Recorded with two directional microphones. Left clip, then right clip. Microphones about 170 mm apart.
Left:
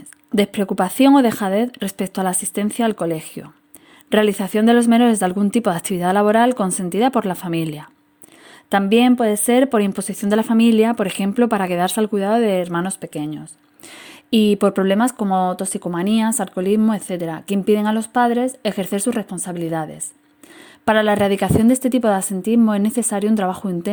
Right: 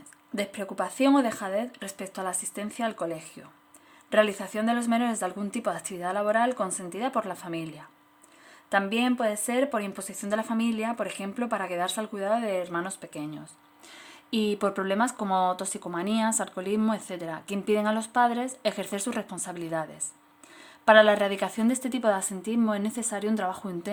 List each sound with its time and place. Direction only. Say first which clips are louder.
0.3 s speech: left 12 dB; 45° left (ahead or behind)